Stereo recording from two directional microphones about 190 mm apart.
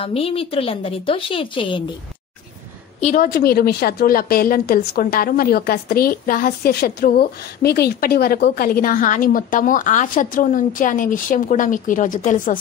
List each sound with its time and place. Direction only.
0.0 s a woman's voice: 30° left (ahead or behind)
3.0 s a woman's voice: 40° left (ahead or behind)